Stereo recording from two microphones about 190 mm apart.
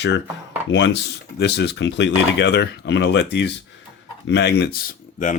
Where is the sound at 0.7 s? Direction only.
70° left (ahead or behind).